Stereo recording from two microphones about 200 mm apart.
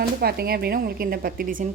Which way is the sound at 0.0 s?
50° right (ahead or behind).